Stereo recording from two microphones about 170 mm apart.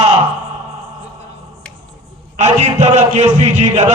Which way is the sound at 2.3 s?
40° right (ahead or behind).